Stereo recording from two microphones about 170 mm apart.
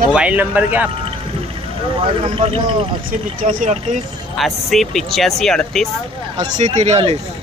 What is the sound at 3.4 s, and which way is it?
Speech, 45° right (ahead or behind).